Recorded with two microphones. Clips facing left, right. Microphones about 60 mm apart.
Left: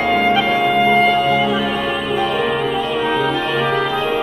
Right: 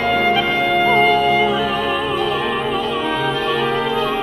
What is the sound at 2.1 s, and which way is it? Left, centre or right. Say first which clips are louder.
Music: left 2 dB; left.